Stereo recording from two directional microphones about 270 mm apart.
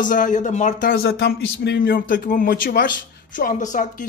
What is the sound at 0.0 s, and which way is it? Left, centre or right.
Speech, left.